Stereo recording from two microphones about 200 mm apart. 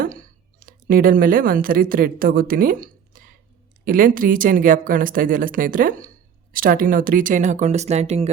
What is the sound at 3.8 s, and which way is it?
Speech, 45° right (ahead or behind).